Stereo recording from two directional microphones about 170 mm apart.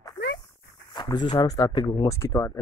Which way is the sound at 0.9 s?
25° left (ahead or behind).